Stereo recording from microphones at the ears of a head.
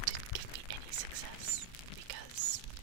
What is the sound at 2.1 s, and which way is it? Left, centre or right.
Whispering, right.